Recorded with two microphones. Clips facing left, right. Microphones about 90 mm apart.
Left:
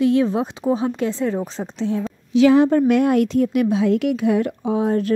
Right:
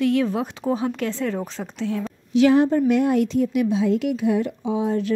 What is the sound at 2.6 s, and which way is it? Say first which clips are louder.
A woman's voice: left 3 dB; 70° left (ahead or behind).